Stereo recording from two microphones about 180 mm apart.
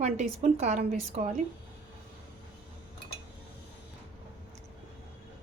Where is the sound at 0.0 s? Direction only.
35° right (ahead or behind).